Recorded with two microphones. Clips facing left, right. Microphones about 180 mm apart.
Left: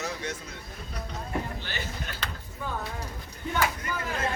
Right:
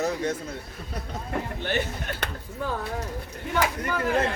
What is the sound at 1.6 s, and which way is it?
Speech, 60° right (ahead or behind).